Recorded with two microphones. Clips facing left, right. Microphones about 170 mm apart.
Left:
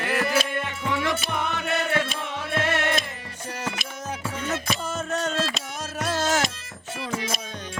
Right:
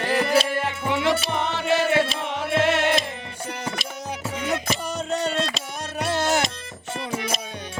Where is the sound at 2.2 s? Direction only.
65° right (ahead or behind).